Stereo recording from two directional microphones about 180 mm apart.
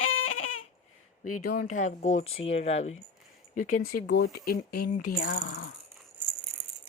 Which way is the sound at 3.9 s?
60° left (ahead or behind).